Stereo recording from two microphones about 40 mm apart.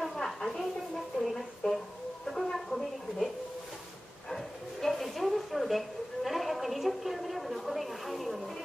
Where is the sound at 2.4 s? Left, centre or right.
Centre.